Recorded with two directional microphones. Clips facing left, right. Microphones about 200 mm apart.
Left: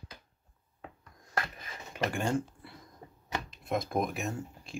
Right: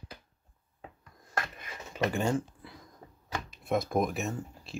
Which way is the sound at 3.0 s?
15° left (ahead or behind).